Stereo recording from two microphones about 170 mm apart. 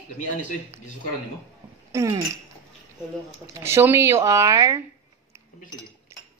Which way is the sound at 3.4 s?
15° right (ahead or behind).